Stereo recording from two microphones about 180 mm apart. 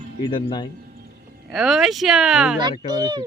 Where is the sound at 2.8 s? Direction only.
25° right (ahead or behind).